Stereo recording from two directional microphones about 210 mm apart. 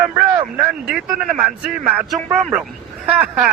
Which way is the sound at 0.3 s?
5° right (ahead or behind).